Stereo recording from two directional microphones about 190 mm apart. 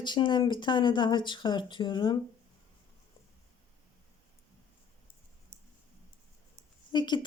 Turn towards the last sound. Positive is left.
turn(degrees=25)  # may be behind; listen again after turning